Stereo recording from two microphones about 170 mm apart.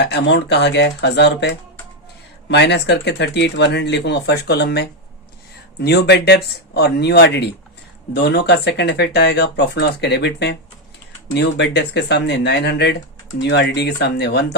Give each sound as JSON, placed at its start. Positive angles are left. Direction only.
{"t": 0.1, "sound": "speech", "side_deg": 85}